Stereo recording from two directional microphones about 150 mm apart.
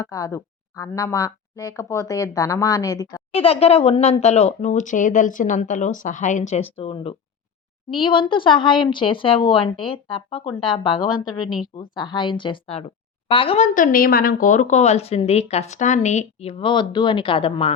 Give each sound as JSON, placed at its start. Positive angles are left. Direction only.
{"t": 0.0, "sound": "speech", "side_deg": 25}
{"t": 3.3, "sound": "a woman's voice", "side_deg": 40}
{"t": 13.6, "sound": "a woman's voice", "side_deg": 65}